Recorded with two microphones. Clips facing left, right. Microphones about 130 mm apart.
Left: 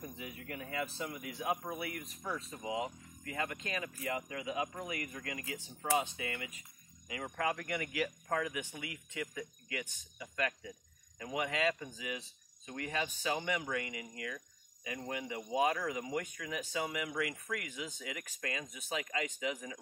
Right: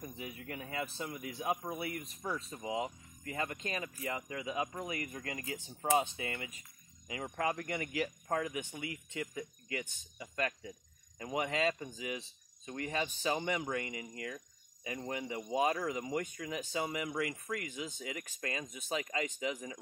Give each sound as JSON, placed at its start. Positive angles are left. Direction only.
{"t": 0.5, "sound": "speech", "side_deg": -30}